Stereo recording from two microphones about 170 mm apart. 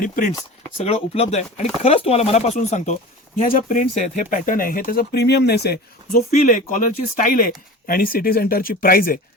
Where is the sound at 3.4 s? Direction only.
55° left (ahead or behind).